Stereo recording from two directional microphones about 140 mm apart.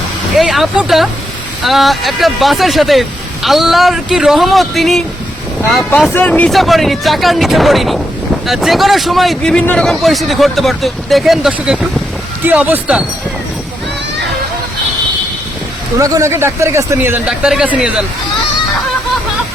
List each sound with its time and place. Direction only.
0.3 s speech: centre (ahead or behind)
6.1 s speech: 10° left (ahead or behind)
6.5 s speech: centre (ahead or behind)
16.0 s speech: 20° right (ahead or behind)
17.2 s speech: 5° right (ahead or behind)